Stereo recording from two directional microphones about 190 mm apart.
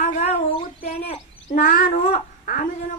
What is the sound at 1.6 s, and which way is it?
A child's voice, 50° left (ahead or behind).